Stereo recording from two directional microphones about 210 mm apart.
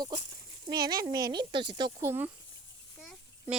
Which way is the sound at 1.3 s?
20° right (ahead or behind).